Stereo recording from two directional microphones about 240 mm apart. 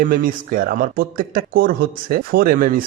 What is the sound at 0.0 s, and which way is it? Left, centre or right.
Speech, right.